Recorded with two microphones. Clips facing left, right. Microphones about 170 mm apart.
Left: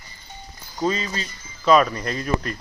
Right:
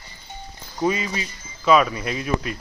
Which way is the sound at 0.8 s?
10° right (ahead or behind).